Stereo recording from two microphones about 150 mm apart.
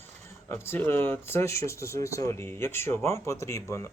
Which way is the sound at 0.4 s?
15° left (ahead or behind).